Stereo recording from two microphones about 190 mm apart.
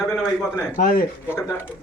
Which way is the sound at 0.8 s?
45° left (ahead or behind).